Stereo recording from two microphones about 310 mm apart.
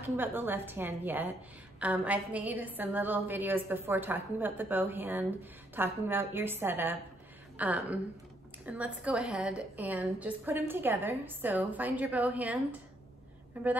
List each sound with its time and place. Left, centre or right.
0.0 s a woman's voice: centre
13.5 s a woman's voice: centre